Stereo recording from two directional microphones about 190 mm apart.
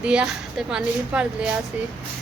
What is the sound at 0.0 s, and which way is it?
A man's voice, 5° right (ahead or behind).